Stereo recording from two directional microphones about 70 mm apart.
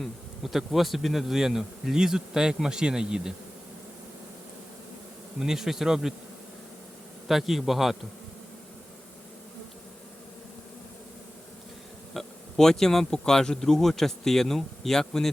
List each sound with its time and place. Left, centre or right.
0.0 s speech: centre
5.4 s speech: centre
7.3 s speech: centre
12.1 s speech: centre